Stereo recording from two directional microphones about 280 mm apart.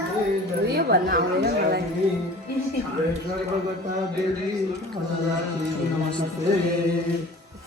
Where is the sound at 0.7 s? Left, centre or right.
Right.